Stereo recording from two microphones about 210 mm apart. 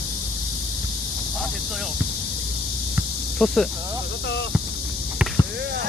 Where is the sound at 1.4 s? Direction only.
Centre (ahead or behind).